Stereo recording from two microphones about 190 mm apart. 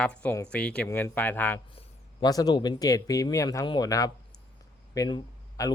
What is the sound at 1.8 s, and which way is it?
Speech, 20° left (ahead or behind).